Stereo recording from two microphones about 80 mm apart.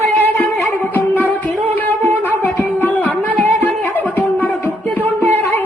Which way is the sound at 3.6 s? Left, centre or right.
Left.